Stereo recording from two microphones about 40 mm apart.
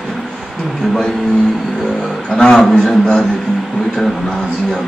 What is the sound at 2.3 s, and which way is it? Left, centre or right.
Speech, left.